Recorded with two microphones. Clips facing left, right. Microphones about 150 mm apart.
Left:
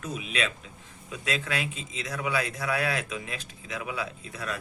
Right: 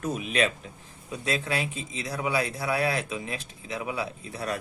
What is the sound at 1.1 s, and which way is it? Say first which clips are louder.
Speech: right 2 dB; 30° right (ahead or behind).